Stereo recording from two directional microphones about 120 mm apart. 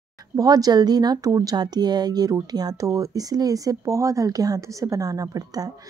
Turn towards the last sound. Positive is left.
turn(degrees=-30)  # may be behind; listen again after turning